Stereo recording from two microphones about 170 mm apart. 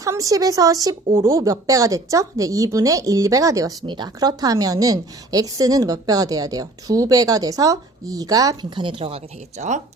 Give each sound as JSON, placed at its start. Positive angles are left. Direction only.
{"t": 0.0, "sound": "a woman's voice", "side_deg": -20}